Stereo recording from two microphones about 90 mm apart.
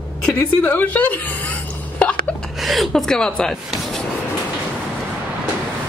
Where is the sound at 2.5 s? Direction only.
Centre (ahead or behind).